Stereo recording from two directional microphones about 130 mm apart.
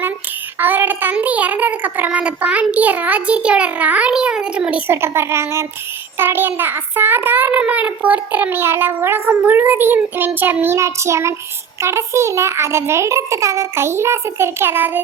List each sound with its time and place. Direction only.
0.6 s a child's voice: 15° right (ahead or behind)
4.9 s a child's voice: 20° right (ahead or behind)